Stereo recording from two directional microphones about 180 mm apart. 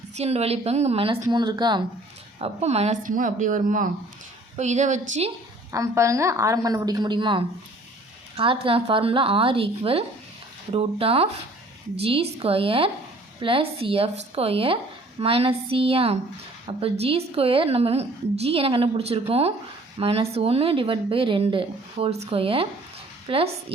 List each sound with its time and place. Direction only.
0.2 s a woman's voice: 35° right (ahead or behind)
2.4 s speech: 35° right (ahead or behind)
5.7 s a woman's voice: 15° right (ahead or behind)
8.6 s a woman's voice: 30° right (ahead or behind)